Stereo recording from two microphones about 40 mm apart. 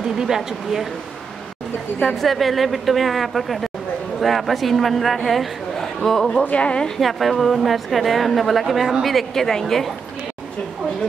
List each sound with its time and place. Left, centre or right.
0.2 s speech: centre
2.2 s a woman's voice: centre
6.5 s a woman's voice: left
7.0 s a woman's voice: centre